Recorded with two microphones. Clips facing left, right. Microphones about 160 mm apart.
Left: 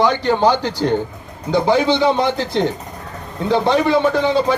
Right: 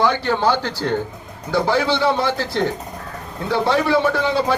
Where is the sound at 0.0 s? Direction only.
15° left (ahead or behind).